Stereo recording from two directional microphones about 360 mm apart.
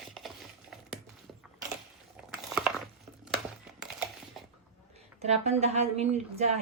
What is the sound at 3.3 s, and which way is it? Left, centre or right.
Crumpling, centre.